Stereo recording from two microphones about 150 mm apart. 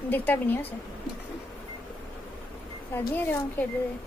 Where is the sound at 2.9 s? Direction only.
15° left (ahead or behind).